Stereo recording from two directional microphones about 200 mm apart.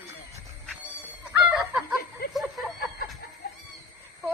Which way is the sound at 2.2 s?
50° left (ahead or behind).